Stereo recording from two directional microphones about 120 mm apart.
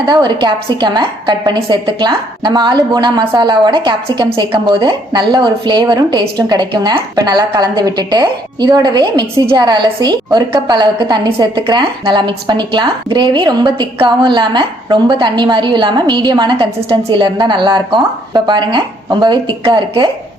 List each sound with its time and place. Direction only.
0.1 s a woman's voice: 35° right (ahead or behind)